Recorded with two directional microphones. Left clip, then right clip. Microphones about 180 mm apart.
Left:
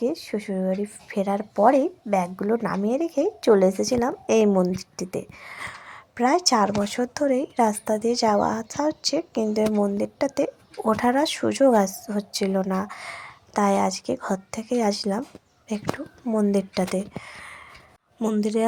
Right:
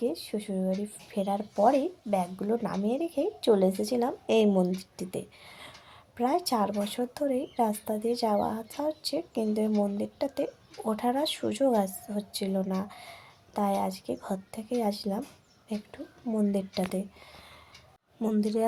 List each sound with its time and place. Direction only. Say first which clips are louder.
0.0 s speech: left 5 dB; 20° left (ahead or behind)
11.9 s a woman's voice: left 8 dB; centre (ahead or behind)
12.1 s a woman's voice: left 7 dB; 15° left (ahead or behind)